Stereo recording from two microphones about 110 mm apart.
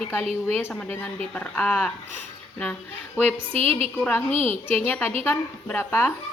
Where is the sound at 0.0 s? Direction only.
15° left (ahead or behind).